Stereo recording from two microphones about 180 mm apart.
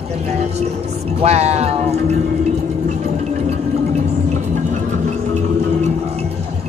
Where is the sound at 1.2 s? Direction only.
35° right (ahead or behind).